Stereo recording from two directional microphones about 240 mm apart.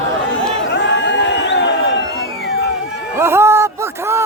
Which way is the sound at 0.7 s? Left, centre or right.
Left.